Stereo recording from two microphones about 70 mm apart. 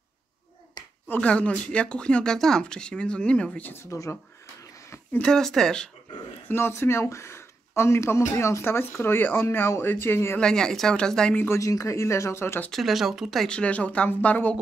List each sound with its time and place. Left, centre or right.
1.0 s speech: left
3.8 s speech: left
5.2 s speech: centre
6.5 s speech: left
10.4 s speech: centre
11.4 s speech: left
12.7 s speech: centre
13.5 s speech: centre